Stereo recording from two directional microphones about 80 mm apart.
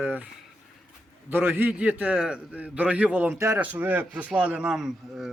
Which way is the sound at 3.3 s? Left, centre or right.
Right.